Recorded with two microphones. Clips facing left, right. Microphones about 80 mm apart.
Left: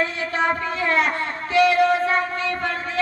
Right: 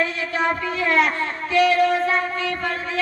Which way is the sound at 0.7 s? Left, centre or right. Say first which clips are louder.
Right 3 dB; left.